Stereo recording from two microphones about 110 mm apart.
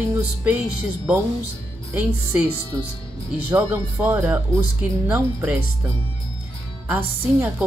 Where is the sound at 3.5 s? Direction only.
20° right (ahead or behind).